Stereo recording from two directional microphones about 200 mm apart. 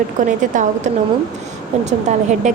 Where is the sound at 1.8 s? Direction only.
35° right (ahead or behind).